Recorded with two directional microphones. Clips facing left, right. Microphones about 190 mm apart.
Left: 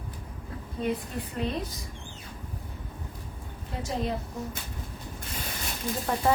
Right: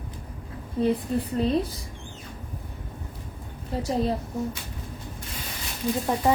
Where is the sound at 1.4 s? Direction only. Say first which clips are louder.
Right 5 dB; 30° right (ahead or behind).